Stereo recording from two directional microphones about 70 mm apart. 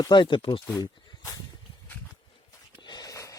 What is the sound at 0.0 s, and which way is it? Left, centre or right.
Speech, left.